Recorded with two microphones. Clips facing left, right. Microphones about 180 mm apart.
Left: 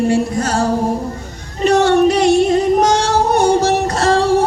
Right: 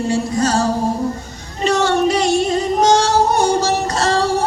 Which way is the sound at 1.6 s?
55° left (ahead or behind).